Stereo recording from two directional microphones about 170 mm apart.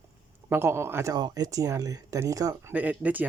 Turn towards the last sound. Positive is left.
turn(degrees=-10)  # may be behind; listen again after turning